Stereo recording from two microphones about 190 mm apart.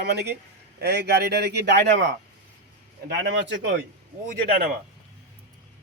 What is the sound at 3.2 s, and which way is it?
Speech, 70° right (ahead or behind).